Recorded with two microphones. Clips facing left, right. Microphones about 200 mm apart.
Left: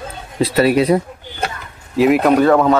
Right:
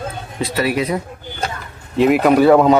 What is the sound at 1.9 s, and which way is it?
Speech, centre (ahead or behind).